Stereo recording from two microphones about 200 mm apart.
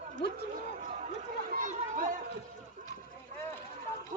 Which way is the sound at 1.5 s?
40° right (ahead or behind).